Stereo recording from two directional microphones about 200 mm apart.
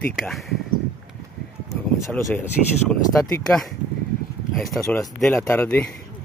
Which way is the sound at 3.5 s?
Centre (ahead or behind).